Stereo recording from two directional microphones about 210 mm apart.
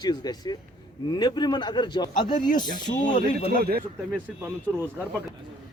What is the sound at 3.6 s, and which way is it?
Speech, 45° right (ahead or behind).